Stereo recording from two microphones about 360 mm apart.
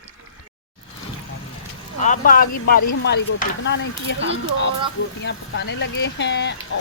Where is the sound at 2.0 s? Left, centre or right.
Left.